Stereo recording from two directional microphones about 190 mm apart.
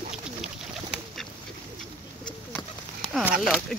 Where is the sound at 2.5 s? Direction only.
Centre (ahead or behind).